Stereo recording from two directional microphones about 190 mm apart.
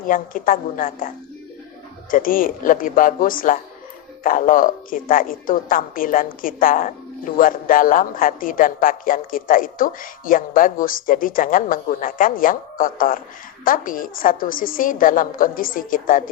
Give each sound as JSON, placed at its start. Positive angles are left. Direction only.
{"t": 0.0, "sound": "a woman's voice", "side_deg": 45}